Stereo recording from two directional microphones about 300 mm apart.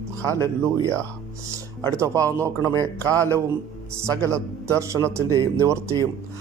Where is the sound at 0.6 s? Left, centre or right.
Centre.